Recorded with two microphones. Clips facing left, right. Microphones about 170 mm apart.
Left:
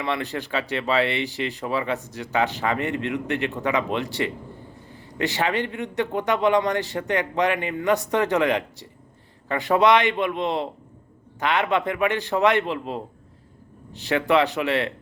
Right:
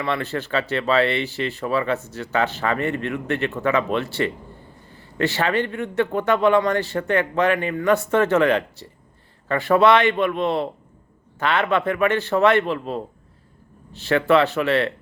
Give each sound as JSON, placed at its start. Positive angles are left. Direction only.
{"t": 0.0, "sound": "speech", "side_deg": 15}